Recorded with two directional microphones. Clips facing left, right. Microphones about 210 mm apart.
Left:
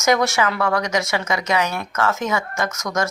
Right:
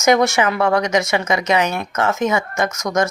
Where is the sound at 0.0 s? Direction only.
20° right (ahead or behind).